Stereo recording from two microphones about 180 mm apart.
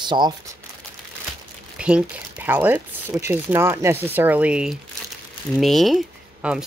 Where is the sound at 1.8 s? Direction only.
5° right (ahead or behind).